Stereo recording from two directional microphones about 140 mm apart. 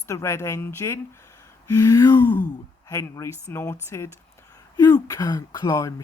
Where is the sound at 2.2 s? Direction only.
10° left (ahead or behind).